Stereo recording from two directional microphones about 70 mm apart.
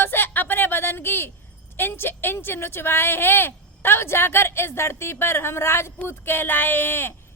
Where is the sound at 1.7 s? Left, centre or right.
Left.